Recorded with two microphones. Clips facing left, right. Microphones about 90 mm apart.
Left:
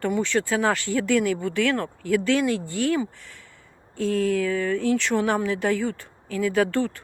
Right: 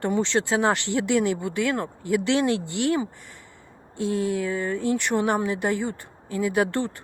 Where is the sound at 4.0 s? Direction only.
55° left (ahead or behind).